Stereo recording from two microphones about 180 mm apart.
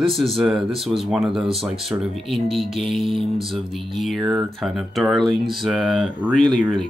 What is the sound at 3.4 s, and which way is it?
Speech, centre (ahead or behind).